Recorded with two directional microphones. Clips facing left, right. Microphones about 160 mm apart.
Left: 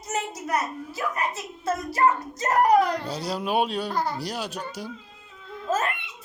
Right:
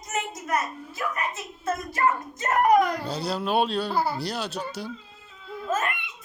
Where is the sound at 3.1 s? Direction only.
10° left (ahead or behind).